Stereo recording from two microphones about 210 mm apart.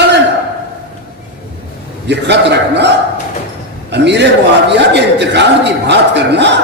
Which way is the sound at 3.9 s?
55° right (ahead or behind).